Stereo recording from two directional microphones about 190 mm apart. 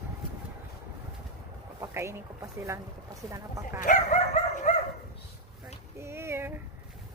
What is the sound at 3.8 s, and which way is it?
Dog, 40° left (ahead or behind).